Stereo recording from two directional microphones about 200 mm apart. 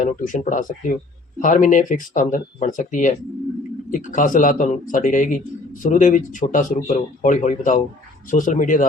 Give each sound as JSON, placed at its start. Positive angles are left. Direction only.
{"t": 0.0, "sound": "speech", "side_deg": 40}